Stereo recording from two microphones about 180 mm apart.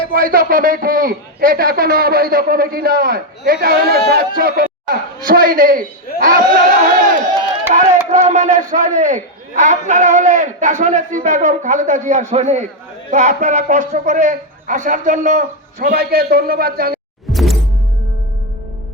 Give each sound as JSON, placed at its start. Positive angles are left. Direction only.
{"t": 0.1, "sound": "a man's voice", "side_deg": -55}
{"t": 8.1, "sound": "a man's voice", "side_deg": -45}
{"t": 17.3, "sound": "music", "side_deg": 0}